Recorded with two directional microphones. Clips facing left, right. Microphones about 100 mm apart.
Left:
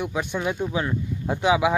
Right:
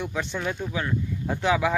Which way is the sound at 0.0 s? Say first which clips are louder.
Left 3 dB; 10° left (ahead or behind).